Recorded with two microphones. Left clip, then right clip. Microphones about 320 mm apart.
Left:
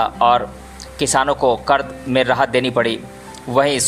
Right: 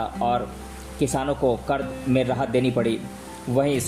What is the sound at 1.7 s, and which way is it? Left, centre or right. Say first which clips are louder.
Speech: left 8 dB; left.